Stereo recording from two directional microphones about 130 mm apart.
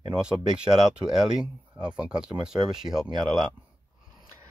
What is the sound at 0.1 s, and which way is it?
Speech, 5° right (ahead or behind).